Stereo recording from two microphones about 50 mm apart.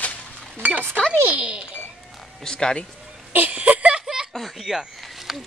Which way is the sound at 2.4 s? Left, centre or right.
Centre.